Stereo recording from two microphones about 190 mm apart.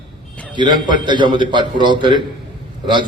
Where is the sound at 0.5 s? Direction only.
25° right (ahead or behind).